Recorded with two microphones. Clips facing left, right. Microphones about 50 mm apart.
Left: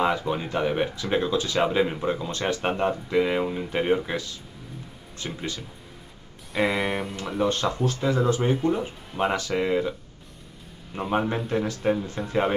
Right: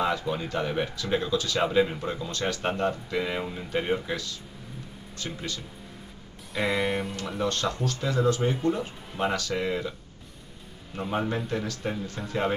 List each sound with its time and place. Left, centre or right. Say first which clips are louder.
0.0 s speech: left 3 dB; left
6.5 s music: left 2 dB; centre
7.2 s speech: left 5 dB; centre
11.0 s speech: left 3 dB; left